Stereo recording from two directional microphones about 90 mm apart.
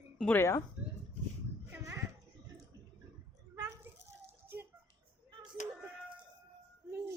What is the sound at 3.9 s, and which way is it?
Children playing, 25° right (ahead or behind).